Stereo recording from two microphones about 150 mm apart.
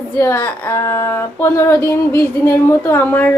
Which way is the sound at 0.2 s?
15° left (ahead or behind).